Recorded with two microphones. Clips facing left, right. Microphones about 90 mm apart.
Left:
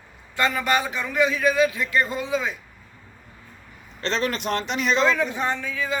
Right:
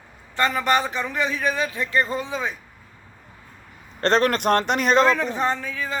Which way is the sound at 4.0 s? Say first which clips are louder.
Right 6 dB; 50° right (ahead or behind).